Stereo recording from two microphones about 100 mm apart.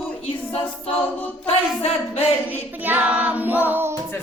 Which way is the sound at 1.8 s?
90° left.